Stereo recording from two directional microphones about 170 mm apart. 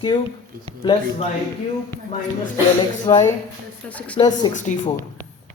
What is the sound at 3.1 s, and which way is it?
Speech, 20° left (ahead or behind).